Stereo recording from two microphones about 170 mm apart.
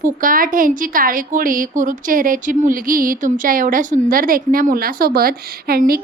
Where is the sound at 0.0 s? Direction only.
55° right (ahead or behind).